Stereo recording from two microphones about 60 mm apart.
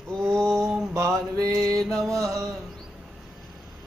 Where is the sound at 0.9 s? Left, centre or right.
Right.